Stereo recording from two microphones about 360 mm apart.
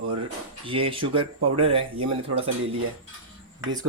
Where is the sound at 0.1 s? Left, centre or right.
Centre.